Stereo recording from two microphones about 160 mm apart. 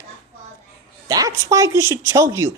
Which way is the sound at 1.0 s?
20° right (ahead or behind).